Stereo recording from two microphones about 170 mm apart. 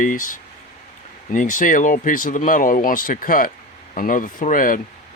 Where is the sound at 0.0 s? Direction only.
50° left (ahead or behind).